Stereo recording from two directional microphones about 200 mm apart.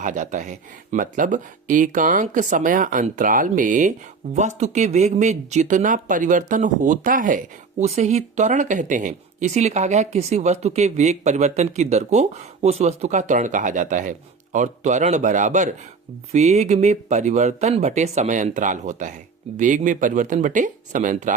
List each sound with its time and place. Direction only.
0.0 s speech: 40° right (ahead or behind)